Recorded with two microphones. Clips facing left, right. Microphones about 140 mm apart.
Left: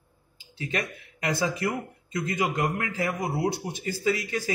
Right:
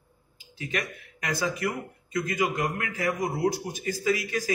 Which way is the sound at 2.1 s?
25° left (ahead or behind).